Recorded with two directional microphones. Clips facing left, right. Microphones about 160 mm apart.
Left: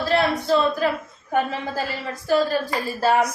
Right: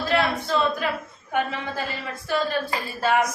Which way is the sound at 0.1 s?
35° left (ahead or behind).